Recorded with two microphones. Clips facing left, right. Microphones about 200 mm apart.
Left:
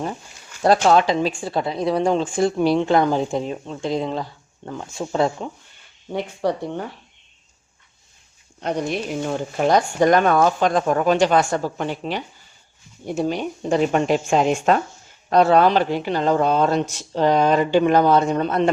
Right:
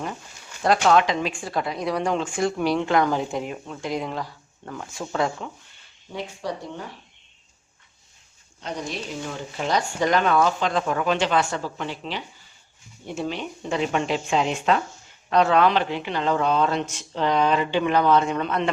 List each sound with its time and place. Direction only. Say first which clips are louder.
0.6 s a woman's voice: left 3 dB; 35° left (ahead or behind)
6.1 s speech: left 8 dB; 60° left (ahead or behind)
8.6 s a man's voice: left 7 dB; 60° left (ahead or behind); by 18.7 s 40° left (ahead or behind)